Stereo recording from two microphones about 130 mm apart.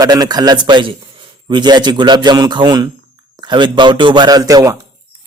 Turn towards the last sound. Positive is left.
turn(degrees=-30)  # may be behind; listen again after turning